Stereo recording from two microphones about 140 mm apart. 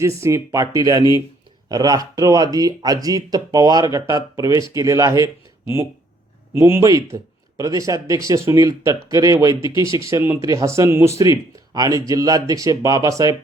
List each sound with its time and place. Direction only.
0.0 s speech: 20° right (ahead or behind)